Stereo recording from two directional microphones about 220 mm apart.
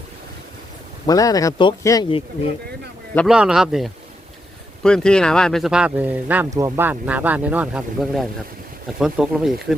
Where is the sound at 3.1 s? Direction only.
5° right (ahead or behind).